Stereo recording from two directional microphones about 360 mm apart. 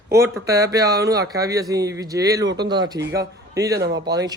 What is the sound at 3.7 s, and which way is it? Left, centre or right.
Speech, right.